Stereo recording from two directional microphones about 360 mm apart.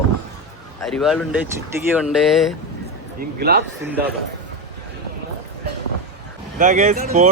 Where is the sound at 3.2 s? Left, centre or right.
Right.